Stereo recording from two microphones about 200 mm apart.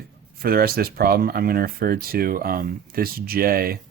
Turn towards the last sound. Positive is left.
turn(degrees=-50)  # may be behind; listen again after turning